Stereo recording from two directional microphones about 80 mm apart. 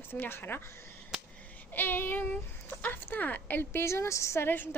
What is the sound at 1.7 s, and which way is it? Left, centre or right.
A woman's voice, left.